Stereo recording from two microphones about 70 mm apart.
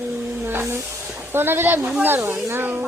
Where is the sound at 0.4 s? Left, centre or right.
Right.